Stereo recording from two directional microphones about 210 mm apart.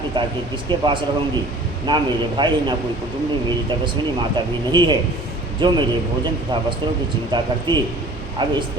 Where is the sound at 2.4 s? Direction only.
20° right (ahead or behind).